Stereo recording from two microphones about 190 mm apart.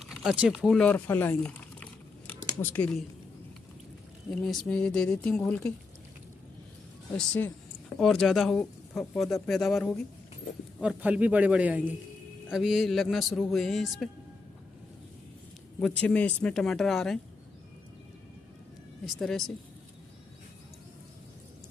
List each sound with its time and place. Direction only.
0.0 s crumpling: centre (ahead or behind)
2.4 s speech: 10° left (ahead or behind)
4.4 s speech: 5° left (ahead or behind)
7.2 s a man's voice: 10° left (ahead or behind)
15.8 s speech: 5° left (ahead or behind)
19.0 s speech: centre (ahead or behind)